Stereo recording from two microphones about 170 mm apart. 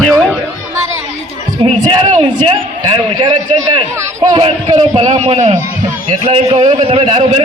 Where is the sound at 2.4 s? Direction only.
30° right (ahead or behind).